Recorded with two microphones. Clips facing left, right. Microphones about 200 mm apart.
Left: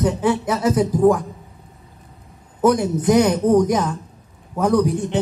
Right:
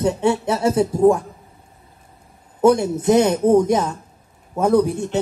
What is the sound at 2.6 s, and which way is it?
Speech, 25° right (ahead or behind).